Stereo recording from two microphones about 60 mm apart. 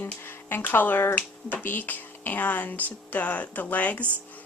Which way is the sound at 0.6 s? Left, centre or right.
Left.